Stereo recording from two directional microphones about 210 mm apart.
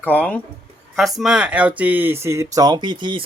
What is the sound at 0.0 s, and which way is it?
Speech, 5° left (ahead or behind).